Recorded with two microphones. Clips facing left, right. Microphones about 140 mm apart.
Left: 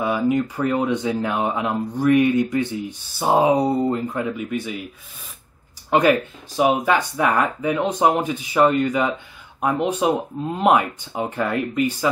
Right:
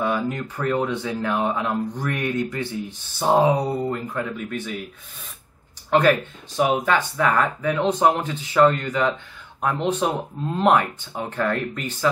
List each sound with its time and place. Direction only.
0.0 s a sound: 10° left (ahead or behind)
0.6 s speech: 15° left (ahead or behind)
3.9 s speech: 25° left (ahead or behind)
4.4 s speech: 10° left (ahead or behind)
5.9 s speech: 15° left (ahead or behind)